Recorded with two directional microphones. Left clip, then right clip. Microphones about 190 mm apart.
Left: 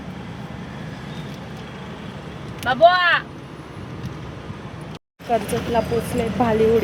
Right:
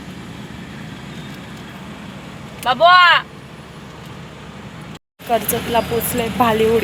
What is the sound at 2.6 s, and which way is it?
Speech, 40° right (ahead or behind).